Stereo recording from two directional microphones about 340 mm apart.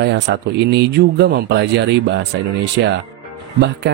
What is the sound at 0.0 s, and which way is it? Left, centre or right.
Speech, right.